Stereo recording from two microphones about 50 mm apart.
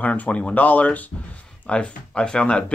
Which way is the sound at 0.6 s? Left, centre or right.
Left.